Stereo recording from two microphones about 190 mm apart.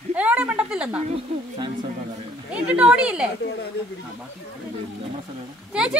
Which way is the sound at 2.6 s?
5° right (ahead or behind).